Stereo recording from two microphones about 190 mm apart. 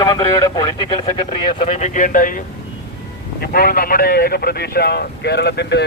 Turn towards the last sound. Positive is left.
turn(degrees=65)  # may be behind; listen again after turning